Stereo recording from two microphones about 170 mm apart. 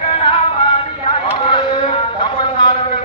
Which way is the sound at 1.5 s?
25° left (ahead or behind).